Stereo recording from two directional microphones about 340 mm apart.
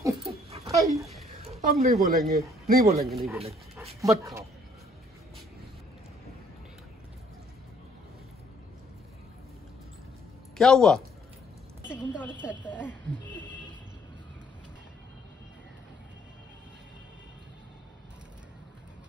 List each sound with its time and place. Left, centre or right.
0.5 s a sound: centre
2.6 s a man's voice: right
3.0 s speech: centre
3.7 s dog: centre
10.6 s a woman's voice: centre